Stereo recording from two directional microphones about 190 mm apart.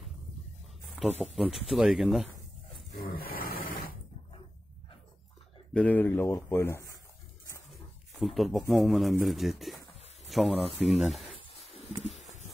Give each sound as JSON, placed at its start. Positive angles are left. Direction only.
{"t": 1.2, "sound": "speech", "side_deg": 0}
{"t": 3.0, "sound": "roar", "side_deg": 50}
{"t": 5.7, "sound": "speech", "side_deg": 5}
{"t": 8.2, "sound": "speech", "side_deg": 0}
{"t": 10.8, "sound": "snake", "side_deg": 0}